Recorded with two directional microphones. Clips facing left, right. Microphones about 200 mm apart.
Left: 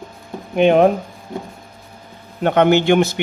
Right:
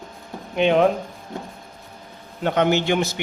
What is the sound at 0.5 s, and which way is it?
Speech, 50° left (ahead or behind).